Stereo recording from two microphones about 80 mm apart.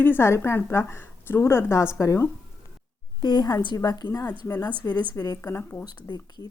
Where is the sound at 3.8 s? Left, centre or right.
Left.